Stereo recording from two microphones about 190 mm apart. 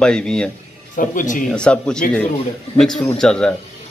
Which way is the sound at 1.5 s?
5° left (ahead or behind).